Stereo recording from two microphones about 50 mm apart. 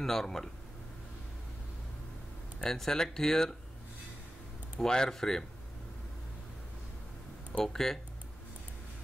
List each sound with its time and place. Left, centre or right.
0.0 s speech: centre
2.6 s speech: centre
4.7 s speech: centre
7.5 s speech: centre